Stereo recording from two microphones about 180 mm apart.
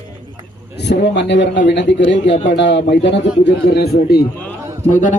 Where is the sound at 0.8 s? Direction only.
70° left (ahead or behind).